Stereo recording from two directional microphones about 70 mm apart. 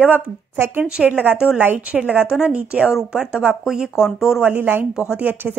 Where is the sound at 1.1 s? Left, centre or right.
Right; by 4.5 s centre.